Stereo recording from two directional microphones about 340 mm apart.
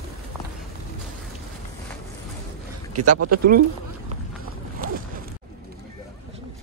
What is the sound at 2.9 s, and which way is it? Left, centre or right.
Speech, right.